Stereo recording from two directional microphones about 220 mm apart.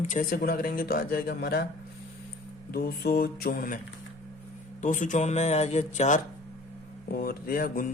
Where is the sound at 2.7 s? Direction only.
45° left (ahead or behind).